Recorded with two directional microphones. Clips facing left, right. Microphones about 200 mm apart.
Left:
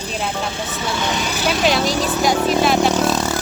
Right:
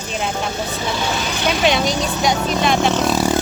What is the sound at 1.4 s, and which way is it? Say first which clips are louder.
Speech: right 1 dB; centre (ahead or behind).